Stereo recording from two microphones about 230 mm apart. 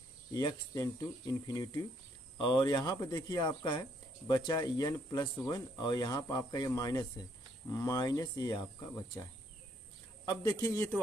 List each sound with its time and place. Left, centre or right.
0.3 s speech: centre
10.2 s speech: centre